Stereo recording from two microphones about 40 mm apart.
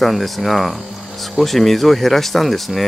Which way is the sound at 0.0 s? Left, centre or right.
Centre.